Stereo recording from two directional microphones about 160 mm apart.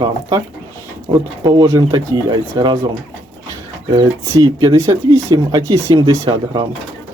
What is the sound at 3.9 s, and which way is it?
Speech, 25° right (ahead or behind).